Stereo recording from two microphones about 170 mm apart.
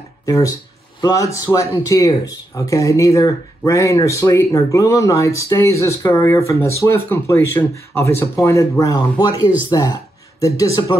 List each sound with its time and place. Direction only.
0.2 s speech: 20° left (ahead or behind)